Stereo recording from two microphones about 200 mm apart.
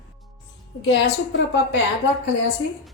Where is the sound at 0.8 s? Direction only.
65° left (ahead or behind).